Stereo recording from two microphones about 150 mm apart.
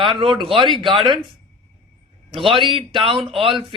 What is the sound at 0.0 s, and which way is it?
Speech, 35° right (ahead or behind).